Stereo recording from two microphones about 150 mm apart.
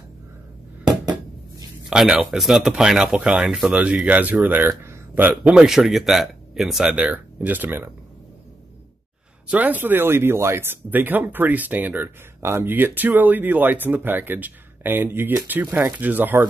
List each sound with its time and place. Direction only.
0.8 s a sound: 30° right (ahead or behind)
1.9 s speech: 5° right (ahead or behind)
9.5 s speech: 10° right (ahead or behind)